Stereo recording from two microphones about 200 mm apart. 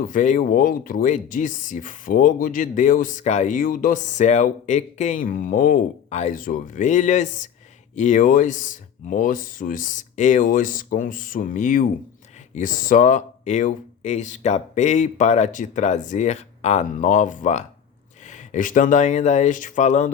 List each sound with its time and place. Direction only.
0.0 s speech: 40° left (ahead or behind)